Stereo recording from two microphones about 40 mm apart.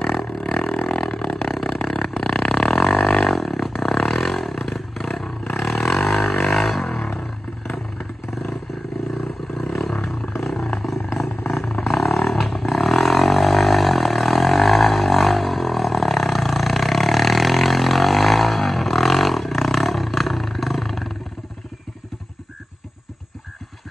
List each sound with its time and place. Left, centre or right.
0.0 s a sound: centre
1.5 s didgeridoo: centre
9.5 s roar: centre
10.3 s wild animals: centre
11.1 s a sound: centre
11.8 s roaring cats: centre